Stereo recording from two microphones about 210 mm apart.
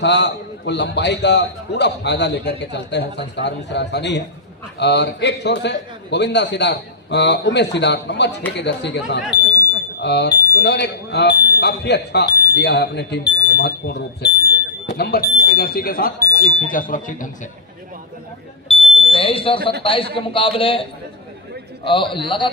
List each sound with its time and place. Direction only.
0.0 s a man's voice: 55° left (ahead or behind); by 17.2 s 40° left (ahead or behind)
18.7 s smoke detector: 25° left (ahead or behind)
19.8 s a man's voice: 25° left (ahead or behind)
21.8 s a man's voice: 25° left (ahead or behind)